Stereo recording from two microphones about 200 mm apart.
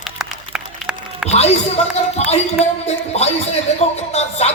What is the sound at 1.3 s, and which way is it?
Speech, 30° left (ahead or behind).